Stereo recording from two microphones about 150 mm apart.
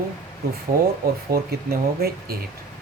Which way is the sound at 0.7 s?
80° right.